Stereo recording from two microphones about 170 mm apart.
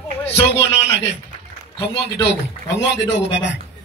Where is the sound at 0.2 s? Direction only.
35° left (ahead or behind).